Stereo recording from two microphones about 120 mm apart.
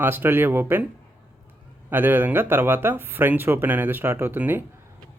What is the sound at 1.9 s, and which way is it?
A man's voice, 15° right (ahead or behind).